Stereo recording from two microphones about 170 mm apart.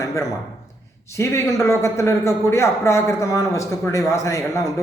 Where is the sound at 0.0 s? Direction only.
20° left (ahead or behind).